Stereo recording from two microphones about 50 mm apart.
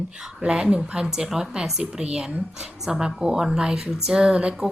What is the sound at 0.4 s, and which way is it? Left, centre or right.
A woman's voice, centre.